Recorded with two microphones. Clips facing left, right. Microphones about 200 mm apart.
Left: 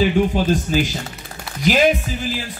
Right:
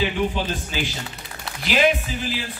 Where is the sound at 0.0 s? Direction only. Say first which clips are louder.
Left 6 dB; 45° left (ahead or behind).